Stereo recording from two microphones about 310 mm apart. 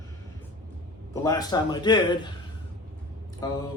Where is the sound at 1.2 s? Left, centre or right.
Centre.